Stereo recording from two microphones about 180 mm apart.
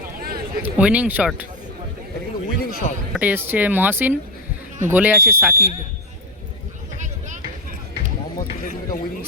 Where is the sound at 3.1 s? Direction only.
10° right (ahead or behind).